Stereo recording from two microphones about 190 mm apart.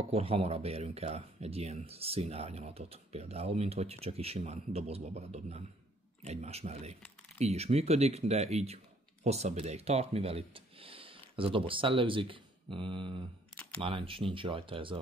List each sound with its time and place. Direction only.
0.1 s speech: 30° right (ahead or behind)